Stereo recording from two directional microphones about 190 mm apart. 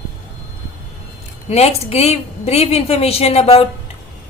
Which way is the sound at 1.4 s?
35° left (ahead or behind).